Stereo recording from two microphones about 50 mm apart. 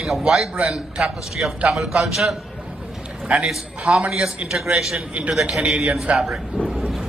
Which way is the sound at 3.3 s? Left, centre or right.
Right.